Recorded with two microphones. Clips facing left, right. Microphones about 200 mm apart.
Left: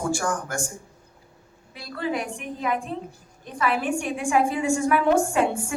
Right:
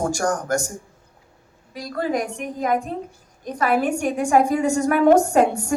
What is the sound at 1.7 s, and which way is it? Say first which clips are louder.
A woman's voice: right 4 dB; 40° right (ahead or behind).